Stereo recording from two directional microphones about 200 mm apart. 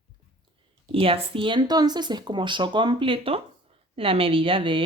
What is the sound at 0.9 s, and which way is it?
Speech, 30° right (ahead or behind).